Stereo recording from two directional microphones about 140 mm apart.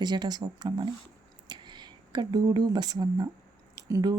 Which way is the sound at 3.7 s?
25° right (ahead or behind).